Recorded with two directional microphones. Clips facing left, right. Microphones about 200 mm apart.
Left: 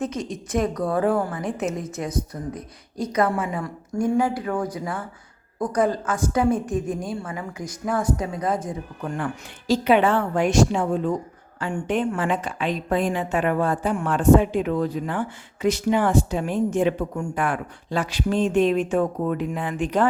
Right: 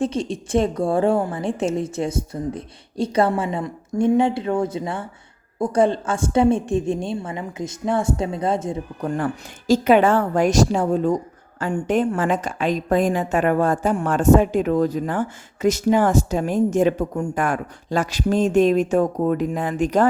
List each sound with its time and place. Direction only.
0.0 s a woman's voice: 30° right (ahead or behind)
9.0 s a woman's voice: 40° right (ahead or behind)